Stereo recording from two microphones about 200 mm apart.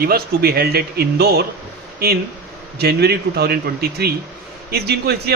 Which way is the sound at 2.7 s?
55° right (ahead or behind).